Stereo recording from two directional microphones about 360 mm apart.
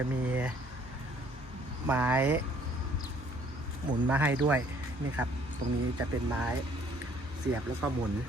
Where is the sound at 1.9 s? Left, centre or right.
Centre.